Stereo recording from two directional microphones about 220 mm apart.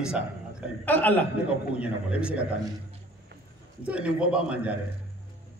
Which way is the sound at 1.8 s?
5° right (ahead or behind).